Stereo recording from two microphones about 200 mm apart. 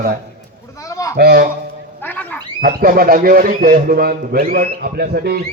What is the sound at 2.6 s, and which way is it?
A man's voice, 45° right (ahead or behind).